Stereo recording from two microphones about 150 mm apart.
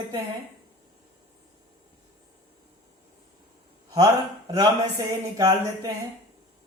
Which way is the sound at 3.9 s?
25° right (ahead or behind).